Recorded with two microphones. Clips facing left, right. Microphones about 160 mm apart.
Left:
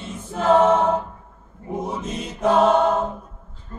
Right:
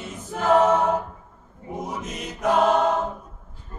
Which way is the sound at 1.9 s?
30° left (ahead or behind).